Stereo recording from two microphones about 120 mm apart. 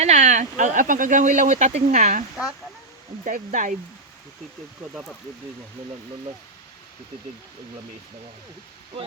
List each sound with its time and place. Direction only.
0.0 s speech: 85° right
3.3 s speech: 90° right
8.9 s speech: 55° right (ahead or behind)